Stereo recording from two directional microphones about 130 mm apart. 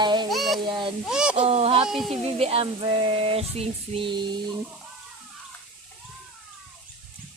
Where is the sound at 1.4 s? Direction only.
50° right (ahead or behind).